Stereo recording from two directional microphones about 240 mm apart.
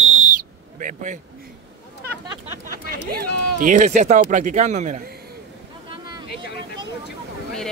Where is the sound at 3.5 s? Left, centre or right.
Right.